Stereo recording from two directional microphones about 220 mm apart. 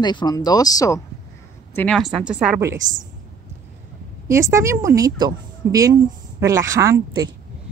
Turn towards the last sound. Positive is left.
turn(degrees=-15)  # may be behind; listen again after turning